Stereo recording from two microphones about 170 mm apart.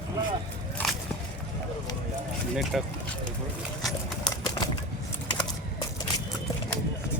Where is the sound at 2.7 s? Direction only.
Centre (ahead or behind).